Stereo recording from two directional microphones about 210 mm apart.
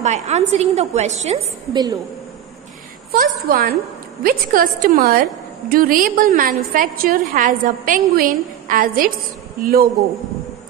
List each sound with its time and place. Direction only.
0.0 s a woman's voice: 35° right (ahead or behind)
1.7 s a woman's voice: 20° right (ahead or behind)
3.1 s a woman's voice: 45° right (ahead or behind)